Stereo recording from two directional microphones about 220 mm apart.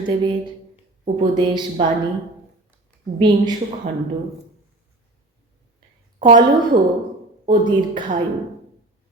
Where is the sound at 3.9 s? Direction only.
30° right (ahead or behind).